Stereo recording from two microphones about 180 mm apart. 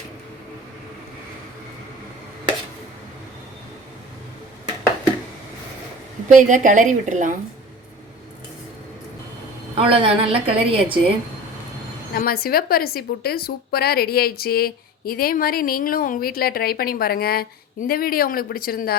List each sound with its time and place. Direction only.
6.2 s a woman's voice: 45° right (ahead or behind)
9.7 s a woman's voice: 30° right (ahead or behind)
12.1 s speech: 55° left (ahead or behind)